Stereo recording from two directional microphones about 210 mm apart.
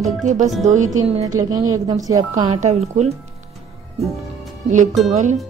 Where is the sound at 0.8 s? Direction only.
75° right (ahead or behind).